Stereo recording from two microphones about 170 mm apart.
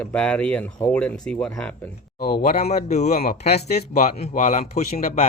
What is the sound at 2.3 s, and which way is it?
Speech, 55° left (ahead or behind).